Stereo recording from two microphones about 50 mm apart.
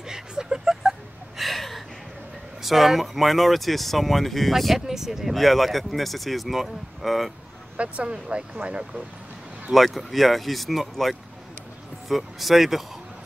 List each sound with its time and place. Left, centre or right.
0.0 s a sound: centre
2.6 s speech: centre
7.7 s speech: right
9.7 s speech: centre